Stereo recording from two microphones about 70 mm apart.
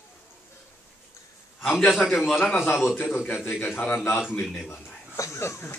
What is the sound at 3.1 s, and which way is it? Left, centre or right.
Speech, left.